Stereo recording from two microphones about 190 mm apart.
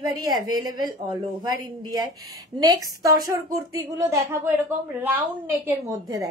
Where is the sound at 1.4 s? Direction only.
20° right (ahead or behind).